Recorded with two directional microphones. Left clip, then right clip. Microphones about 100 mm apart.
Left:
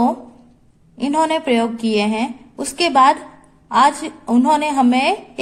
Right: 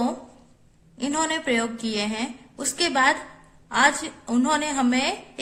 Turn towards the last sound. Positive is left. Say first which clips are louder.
# left 8 dB
turn(degrees=35)  # may be behind; listen again after turning